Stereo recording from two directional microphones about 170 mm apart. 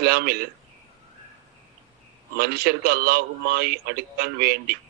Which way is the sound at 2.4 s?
65° right (ahead or behind).